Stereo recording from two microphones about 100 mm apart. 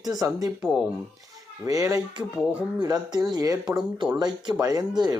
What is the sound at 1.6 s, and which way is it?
Speech, 35° right (ahead or behind).